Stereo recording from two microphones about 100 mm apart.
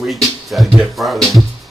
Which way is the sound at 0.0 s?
Centre (ahead or behind).